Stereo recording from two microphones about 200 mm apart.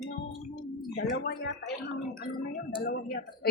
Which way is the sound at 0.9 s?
50° left (ahead or behind).